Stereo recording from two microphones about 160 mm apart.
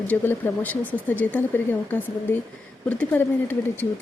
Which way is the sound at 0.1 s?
10° left (ahead or behind).